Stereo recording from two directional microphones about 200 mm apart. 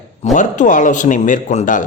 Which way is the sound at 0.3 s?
40° left (ahead or behind).